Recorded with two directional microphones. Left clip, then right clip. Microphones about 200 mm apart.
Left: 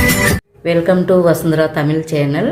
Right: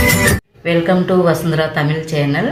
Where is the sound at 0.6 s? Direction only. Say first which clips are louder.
Left 2 dB; 55° left (ahead or behind).